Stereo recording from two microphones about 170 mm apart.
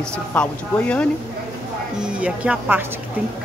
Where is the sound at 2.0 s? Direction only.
5° right (ahead or behind).